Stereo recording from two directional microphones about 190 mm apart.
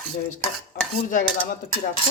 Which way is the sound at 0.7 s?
50° left (ahead or behind).